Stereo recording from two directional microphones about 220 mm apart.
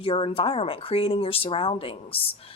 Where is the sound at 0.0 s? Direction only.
25° left (ahead or behind).